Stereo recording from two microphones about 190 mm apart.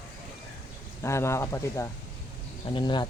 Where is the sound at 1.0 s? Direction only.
15° left (ahead or behind).